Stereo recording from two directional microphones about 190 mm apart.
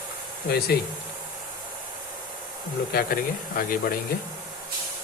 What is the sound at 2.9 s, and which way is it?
Speech, 50° left (ahead or behind).